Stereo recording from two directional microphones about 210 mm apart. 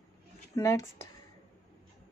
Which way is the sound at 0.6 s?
15° left (ahead or behind).